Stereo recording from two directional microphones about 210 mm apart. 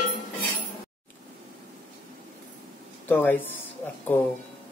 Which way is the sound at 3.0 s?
10° left (ahead or behind).